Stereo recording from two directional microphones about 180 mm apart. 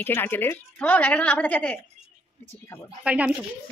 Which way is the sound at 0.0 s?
10° left (ahead or behind).